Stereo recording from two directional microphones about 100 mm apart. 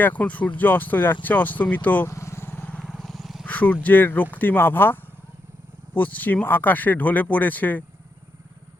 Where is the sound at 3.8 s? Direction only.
20° left (ahead or behind).